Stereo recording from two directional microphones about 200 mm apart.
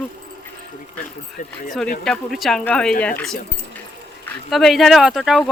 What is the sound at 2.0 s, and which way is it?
Speech, centre (ahead or behind).